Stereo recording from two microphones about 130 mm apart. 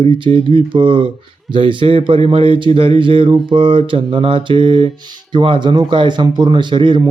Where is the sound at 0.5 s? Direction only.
40° right (ahead or behind).